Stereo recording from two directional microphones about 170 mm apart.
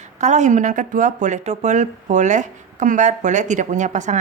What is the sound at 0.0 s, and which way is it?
Speech, 45° right (ahead or behind).